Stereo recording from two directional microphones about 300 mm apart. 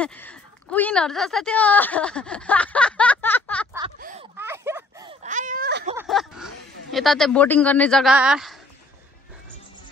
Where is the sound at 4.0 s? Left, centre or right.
Right.